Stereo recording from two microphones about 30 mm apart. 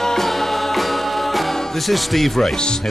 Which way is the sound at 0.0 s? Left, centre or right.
Centre.